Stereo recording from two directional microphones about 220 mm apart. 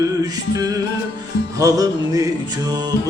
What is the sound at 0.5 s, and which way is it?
Music, 15° right (ahead or behind).